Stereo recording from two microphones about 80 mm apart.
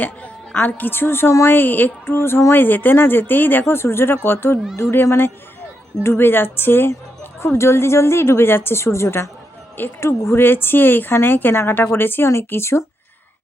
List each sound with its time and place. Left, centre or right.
0.5 s speech: left
1.5 s a woman's voice: left